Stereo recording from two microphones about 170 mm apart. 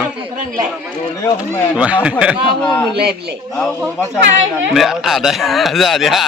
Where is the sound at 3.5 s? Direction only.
Centre (ahead or behind).